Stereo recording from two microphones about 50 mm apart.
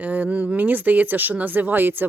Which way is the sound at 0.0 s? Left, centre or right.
Right.